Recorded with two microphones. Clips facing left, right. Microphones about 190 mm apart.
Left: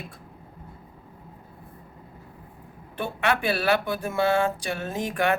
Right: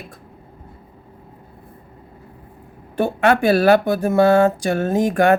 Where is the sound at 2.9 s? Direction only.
45° right (ahead or behind).